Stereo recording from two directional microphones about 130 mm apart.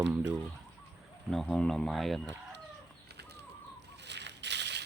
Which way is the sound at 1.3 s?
Centre (ahead or behind).